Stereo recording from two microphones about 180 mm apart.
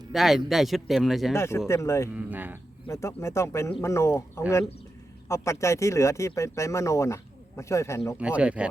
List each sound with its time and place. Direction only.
0.1 s speech: centre (ahead or behind)
1.4 s speech: 15° left (ahead or behind)
2.1 s speech: 10° right (ahead or behind)
2.8 s speech: 15° left (ahead or behind)
8.2 s speech: 5° right (ahead or behind)